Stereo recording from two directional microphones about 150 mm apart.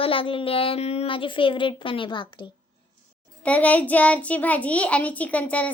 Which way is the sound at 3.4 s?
10° left (ahead or behind).